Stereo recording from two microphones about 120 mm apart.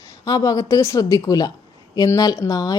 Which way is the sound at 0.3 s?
30° left (ahead or behind).